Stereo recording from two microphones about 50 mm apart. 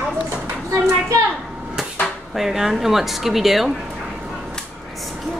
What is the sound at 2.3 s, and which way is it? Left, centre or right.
Speech, centre.